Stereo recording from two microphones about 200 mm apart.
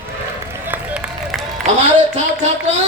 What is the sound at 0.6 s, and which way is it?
Applause, 5° right (ahead or behind).